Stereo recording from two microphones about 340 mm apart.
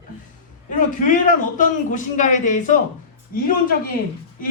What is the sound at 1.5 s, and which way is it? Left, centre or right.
A man's voice, left.